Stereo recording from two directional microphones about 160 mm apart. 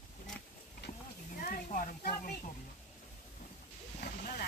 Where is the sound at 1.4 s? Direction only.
60° left (ahead or behind).